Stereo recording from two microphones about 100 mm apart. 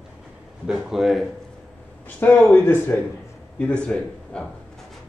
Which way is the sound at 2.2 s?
20° left (ahead or behind).